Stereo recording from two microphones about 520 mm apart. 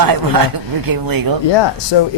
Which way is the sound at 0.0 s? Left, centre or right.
Right.